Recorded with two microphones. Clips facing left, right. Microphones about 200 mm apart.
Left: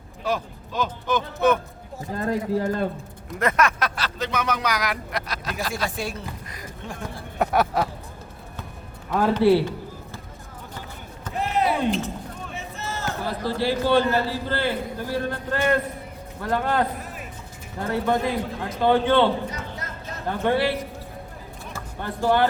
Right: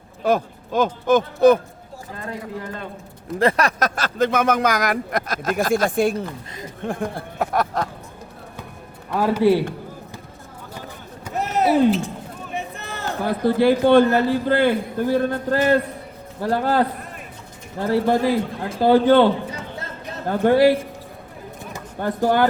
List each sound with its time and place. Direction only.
0.3 s speech: 50° right (ahead or behind)
2.1 s a man's voice: 35° left (ahead or behind)
3.3 s a man's voice: 30° right (ahead or behind); by 7.3 s 55° right (ahead or behind)
7.3 s a sound: centre (ahead or behind)
9.1 s a man's voice: 10° right (ahead or behind)
11.3 s a sound: 45° right (ahead or behind)
12.5 s a sound: 60° right (ahead or behind)
13.2 s a man's voice: 55° right (ahead or behind)
16.4 s a man's voice: 35° right (ahead or behind)
17.8 s a man's voice: 30° right (ahead or behind)
22.0 s speech: 45° right (ahead or behind)